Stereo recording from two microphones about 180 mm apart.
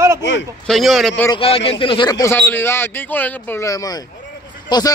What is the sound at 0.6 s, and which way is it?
Speech, centre (ahead or behind).